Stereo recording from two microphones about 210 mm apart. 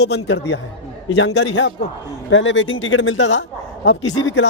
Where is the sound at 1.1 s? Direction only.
60° left (ahead or behind).